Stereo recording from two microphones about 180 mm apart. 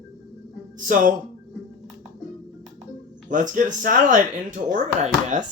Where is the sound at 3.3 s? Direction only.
45° right (ahead or behind).